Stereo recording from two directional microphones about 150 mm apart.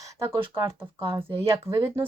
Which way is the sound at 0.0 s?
20° right (ahead or behind).